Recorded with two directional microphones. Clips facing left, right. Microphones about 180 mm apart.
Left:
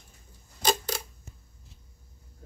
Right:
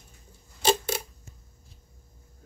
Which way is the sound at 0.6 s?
25° right (ahead or behind).